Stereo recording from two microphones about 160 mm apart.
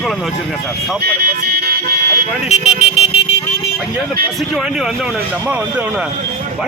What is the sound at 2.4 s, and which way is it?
Speech, 45° left (ahead or behind).